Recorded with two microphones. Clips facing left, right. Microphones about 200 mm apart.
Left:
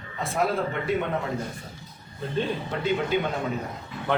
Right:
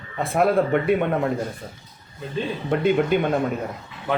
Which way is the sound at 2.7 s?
55° right (ahead or behind).